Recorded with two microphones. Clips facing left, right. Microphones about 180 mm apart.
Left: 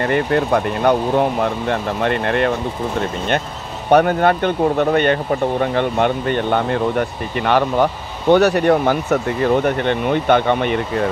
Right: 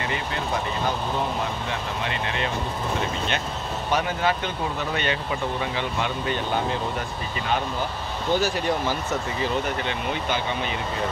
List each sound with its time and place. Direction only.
0.0 s speech: 55° left (ahead or behind)
3.9 s speech: 55° left (ahead or behind)